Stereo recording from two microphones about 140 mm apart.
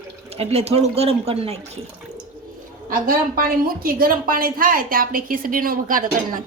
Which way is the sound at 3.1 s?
90° right.